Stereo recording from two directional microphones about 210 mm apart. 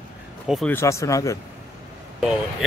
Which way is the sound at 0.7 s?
15° left (ahead or behind).